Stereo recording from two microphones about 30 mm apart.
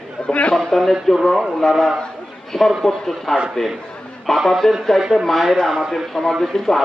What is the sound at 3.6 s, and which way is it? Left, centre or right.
Speech, left.